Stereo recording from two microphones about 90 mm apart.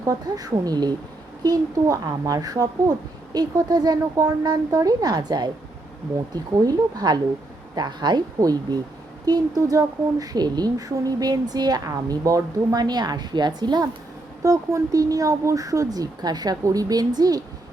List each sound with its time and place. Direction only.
0.0 s speech: 40° right (ahead or behind)
14.4 s speech: 35° right (ahead or behind)